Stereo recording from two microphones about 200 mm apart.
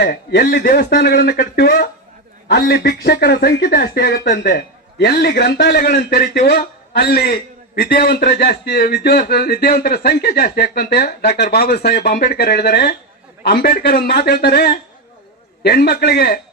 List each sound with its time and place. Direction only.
0.0 s speech: 50° left (ahead or behind)